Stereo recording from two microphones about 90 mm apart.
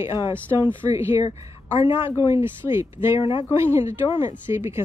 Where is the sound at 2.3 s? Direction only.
30° right (ahead or behind).